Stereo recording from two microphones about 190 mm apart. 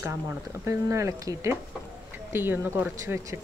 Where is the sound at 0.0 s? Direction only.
15° right (ahead or behind).